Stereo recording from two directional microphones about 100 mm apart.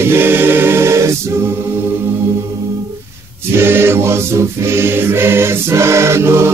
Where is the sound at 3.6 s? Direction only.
25° right (ahead or behind).